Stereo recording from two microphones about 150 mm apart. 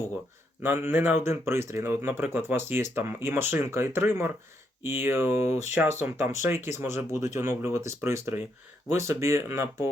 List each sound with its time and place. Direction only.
0.6 s speech: 15° right (ahead or behind)